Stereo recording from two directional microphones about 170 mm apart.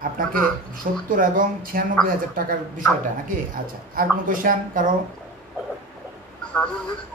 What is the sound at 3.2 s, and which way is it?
Speech, 55° right (ahead or behind).